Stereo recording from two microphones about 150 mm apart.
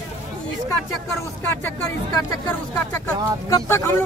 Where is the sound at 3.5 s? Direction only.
20° left (ahead or behind).